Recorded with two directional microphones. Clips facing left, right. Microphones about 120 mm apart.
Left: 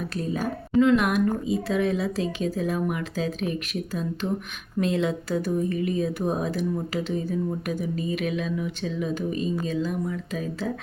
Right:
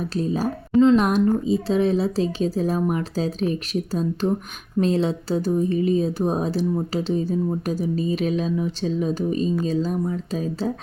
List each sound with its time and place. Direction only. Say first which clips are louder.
0.1 s speech: right 5 dB; 30° right (ahead or behind)